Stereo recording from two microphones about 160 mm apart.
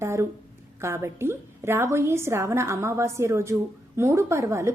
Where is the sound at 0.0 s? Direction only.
15° right (ahead or behind).